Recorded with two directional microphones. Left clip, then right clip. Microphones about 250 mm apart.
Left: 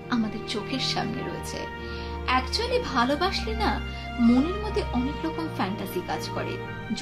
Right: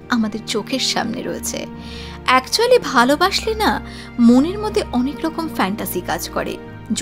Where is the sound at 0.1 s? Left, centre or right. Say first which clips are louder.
Right 9 dB; right.